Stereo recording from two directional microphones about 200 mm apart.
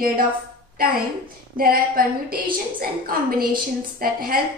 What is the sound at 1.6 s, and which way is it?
A woman's voice, 45° right (ahead or behind).